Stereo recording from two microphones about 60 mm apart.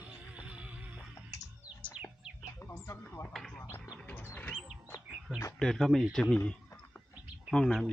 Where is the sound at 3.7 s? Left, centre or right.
Left.